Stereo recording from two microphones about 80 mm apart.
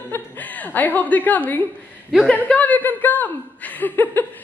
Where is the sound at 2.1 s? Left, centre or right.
Centre.